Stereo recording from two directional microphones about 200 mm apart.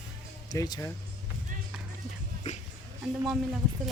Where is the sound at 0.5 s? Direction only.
15° left (ahead or behind).